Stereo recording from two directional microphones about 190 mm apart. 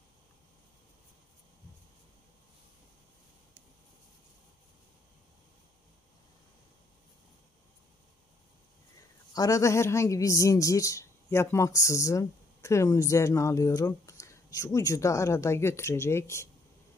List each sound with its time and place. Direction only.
9.3 s a woman's voice: 15° left (ahead or behind)